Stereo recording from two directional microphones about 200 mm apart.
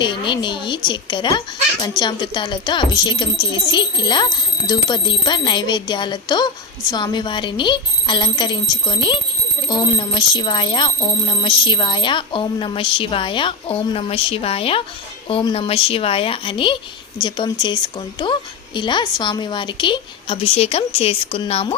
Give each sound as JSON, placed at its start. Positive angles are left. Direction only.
{"t": 0.0, "sound": "speech", "side_deg": 25}